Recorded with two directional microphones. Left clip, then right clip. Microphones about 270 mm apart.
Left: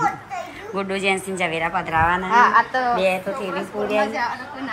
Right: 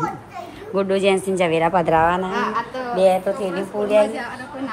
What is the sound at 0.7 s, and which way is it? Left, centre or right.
Speech, centre.